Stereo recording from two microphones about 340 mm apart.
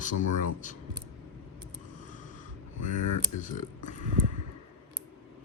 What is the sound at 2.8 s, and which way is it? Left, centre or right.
Speech, left.